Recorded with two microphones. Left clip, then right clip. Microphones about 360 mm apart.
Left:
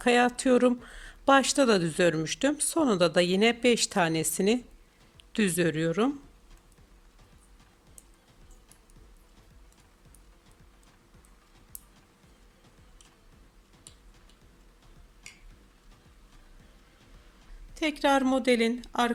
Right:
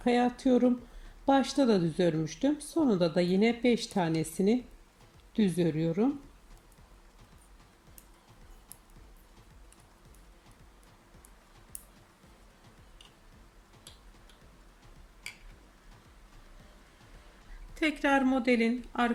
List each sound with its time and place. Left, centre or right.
0.0 s a sound: centre
0.3 s speech: left
17.7 s speech: centre